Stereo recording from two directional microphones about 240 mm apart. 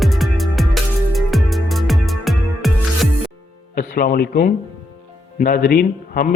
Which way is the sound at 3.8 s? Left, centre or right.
Left.